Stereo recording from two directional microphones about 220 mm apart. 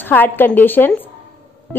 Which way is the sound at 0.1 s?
10° left (ahead or behind).